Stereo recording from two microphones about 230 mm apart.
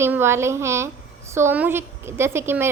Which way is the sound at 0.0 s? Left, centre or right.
Centre.